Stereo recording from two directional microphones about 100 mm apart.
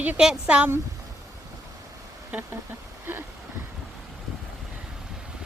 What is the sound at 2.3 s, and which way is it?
Speech, 20° right (ahead or behind).